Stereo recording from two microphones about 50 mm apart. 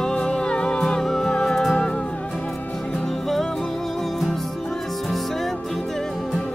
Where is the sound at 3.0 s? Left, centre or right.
Centre.